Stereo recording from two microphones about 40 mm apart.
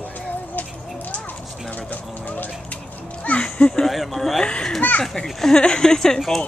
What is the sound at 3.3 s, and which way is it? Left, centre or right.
Speech, left.